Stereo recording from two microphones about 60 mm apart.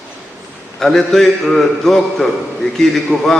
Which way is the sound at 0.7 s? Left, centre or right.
Centre.